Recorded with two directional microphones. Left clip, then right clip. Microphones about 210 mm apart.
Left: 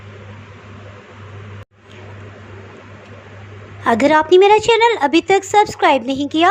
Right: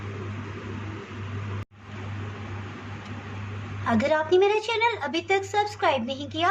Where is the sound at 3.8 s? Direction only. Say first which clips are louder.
Left 11 dB; 35° left (ahead or behind).